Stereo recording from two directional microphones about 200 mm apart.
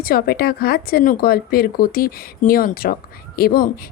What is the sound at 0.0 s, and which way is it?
A woman's voice, 50° left (ahead or behind).